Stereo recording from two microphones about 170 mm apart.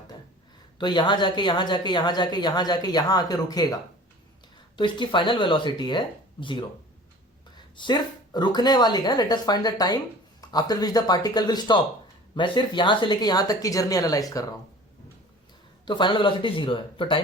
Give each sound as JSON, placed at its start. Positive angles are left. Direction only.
{"t": 0.8, "sound": "speech", "side_deg": 25}
{"t": 4.8, "sound": "speech", "side_deg": 30}
{"t": 15.9, "sound": "speech", "side_deg": 25}